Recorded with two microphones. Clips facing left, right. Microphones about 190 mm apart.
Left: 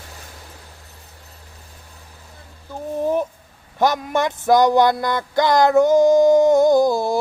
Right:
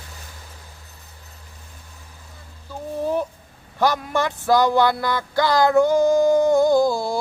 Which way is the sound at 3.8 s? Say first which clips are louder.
Left 2 dB; 20° left (ahead or behind).